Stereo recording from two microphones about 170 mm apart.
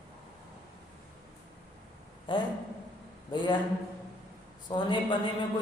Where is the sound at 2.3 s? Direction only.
25° left (ahead or behind).